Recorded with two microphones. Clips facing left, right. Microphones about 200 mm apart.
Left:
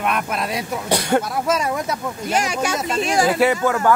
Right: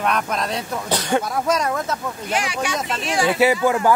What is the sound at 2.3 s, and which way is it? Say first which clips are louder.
Speech: left 2 dB; 40° left (ahead or behind).